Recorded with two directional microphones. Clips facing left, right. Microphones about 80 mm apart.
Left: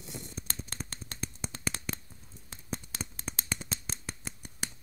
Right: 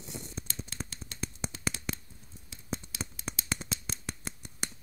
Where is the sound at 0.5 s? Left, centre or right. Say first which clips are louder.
Even; left.